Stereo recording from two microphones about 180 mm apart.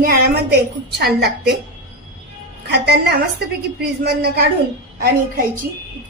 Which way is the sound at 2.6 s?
70° right (ahead or behind).